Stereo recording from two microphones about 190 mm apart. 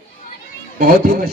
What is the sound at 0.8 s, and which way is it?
Speech, 50° right (ahead or behind).